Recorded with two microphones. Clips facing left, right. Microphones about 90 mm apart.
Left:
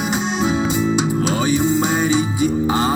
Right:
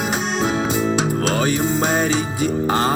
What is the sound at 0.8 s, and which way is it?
Music, 50° right (ahead or behind).